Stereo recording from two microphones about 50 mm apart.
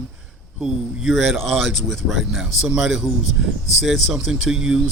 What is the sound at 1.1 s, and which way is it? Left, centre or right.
Speech, centre.